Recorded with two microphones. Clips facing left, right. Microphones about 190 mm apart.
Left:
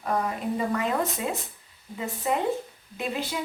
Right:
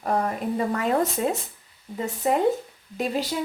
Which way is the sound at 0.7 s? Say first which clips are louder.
Right 3 dB; 40° right (ahead or behind).